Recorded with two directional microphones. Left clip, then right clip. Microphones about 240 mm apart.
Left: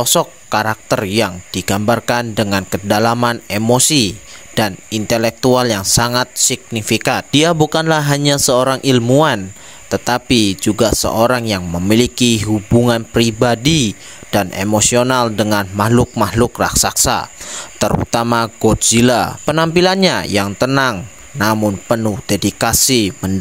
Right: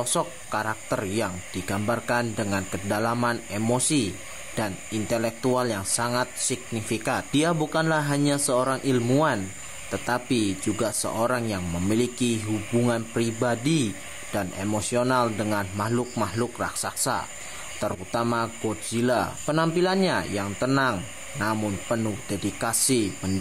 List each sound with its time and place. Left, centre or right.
0.0 s speech: left